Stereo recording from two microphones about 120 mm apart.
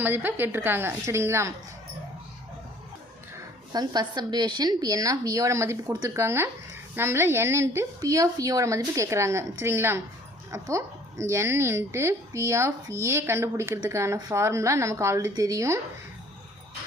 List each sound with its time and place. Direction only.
0.0 s a woman's voice: 15° right (ahead or behind)
3.7 s a woman's voice: 35° right (ahead or behind)